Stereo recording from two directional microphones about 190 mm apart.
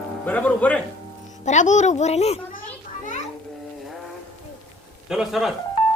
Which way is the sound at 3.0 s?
40° left (ahead or behind).